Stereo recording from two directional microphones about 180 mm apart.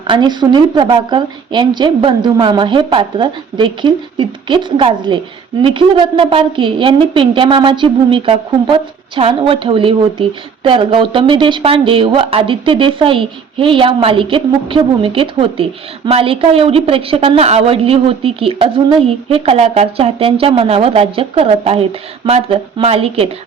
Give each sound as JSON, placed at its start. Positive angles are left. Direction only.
{"t": 0.1, "sound": "a woman's voice", "side_deg": -25}